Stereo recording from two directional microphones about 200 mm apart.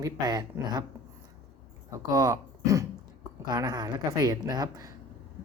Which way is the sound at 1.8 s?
15° right (ahead or behind).